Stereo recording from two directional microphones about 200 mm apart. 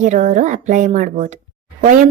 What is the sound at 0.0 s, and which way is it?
A woman's voice, 40° right (ahead or behind).